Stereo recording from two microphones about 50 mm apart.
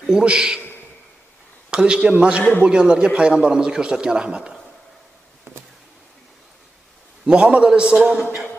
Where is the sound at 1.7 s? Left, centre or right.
Centre.